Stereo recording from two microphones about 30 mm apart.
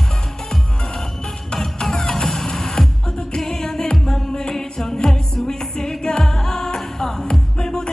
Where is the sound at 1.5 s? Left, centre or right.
Centre.